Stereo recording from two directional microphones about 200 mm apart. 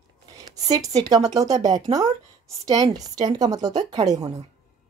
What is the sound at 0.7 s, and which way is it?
Speech, 20° right (ahead or behind).